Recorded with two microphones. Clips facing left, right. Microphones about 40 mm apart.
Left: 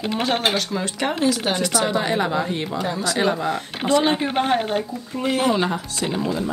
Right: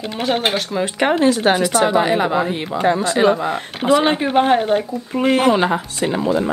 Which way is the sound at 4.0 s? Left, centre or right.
Right.